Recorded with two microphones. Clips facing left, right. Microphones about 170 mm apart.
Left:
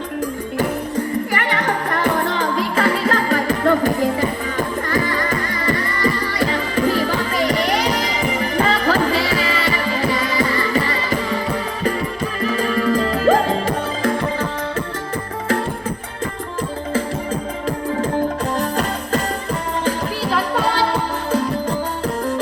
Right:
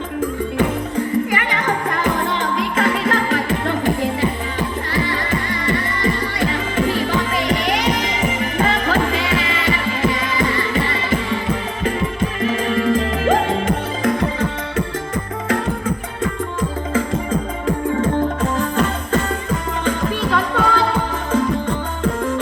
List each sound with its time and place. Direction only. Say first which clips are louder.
0.5 s music: left 1 dB; 40° left (ahead or behind)
12.4 s music: even; 40° left (ahead or behind)
18.5 s music: right 1 dB; 35° left (ahead or behind)